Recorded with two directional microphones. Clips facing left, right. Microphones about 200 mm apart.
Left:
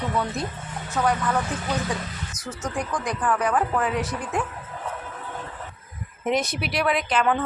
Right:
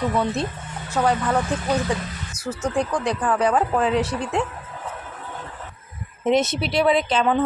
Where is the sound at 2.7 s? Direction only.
30° right (ahead or behind).